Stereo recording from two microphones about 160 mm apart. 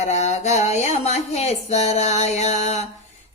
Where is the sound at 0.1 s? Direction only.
45° left (ahead or behind).